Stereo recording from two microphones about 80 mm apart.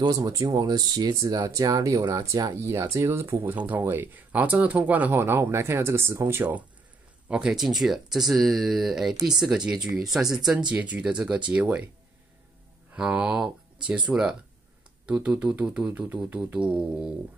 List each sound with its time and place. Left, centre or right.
0.0 s speech: right
1.5 s speech: right
7.2 s speech: centre
12.9 s speech: centre
15.0 s speech: centre